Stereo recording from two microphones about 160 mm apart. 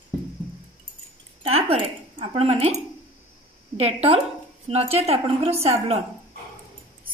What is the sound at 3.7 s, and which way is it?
Speech, 40° right (ahead or behind).